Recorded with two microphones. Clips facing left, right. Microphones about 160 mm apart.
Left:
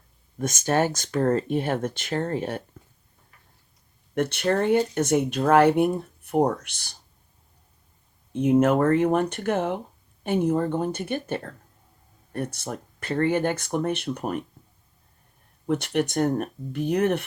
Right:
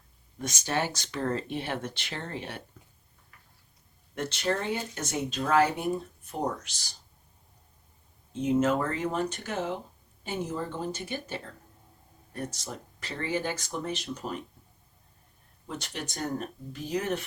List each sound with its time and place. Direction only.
0.3 s speech: 50° left (ahead or behind)
4.1 s speech: 60° left (ahead or behind)
8.3 s speech: 60° left (ahead or behind)
15.6 s speech: 60° left (ahead or behind)